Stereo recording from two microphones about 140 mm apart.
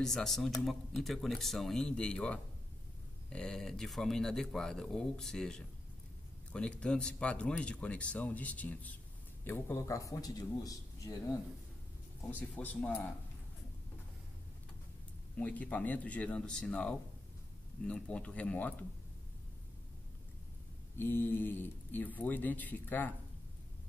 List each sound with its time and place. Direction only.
0.0 s a man's voice: 5° left (ahead or behind); by 11.3 s 25° left (ahead or behind)
12.3 s speech: 10° left (ahead or behind)
15.3 s speech: 10° left (ahead or behind)
21.0 s speech: 15° left (ahead or behind)